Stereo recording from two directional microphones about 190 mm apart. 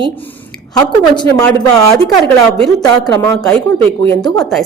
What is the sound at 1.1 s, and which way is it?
Speech, 25° left (ahead or behind).